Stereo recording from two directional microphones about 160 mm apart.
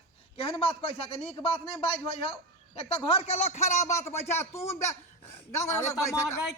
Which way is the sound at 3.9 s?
15° left (ahead or behind).